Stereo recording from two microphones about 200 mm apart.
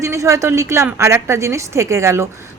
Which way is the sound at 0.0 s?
15° right (ahead or behind).